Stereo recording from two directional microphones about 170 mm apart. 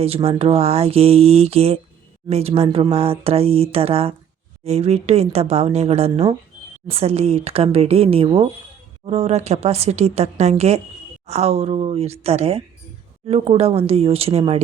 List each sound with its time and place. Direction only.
0.0 s speech: 35° right (ahead or behind)